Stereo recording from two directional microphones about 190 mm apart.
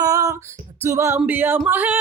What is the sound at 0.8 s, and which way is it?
Female singing, 15° right (ahead or behind).